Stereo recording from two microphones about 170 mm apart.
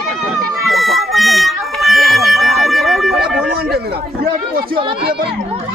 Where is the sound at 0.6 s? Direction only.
Centre (ahead or behind).